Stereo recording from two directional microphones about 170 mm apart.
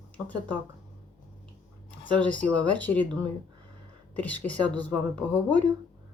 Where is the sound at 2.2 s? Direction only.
10° left (ahead or behind).